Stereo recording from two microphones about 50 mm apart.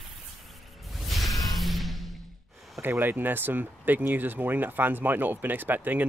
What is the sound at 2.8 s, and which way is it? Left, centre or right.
Speech, right.